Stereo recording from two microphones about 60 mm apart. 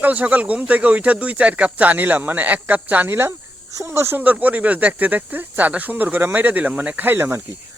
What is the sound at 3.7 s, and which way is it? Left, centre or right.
Speech, right.